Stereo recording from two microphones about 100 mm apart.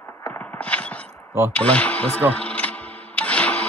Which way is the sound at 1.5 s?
15° left (ahead or behind).